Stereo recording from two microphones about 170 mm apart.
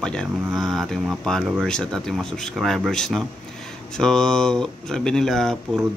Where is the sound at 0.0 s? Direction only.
5° left (ahead or behind).